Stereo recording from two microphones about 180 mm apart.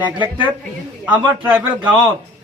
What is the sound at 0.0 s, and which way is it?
A man's voice, 25° right (ahead or behind).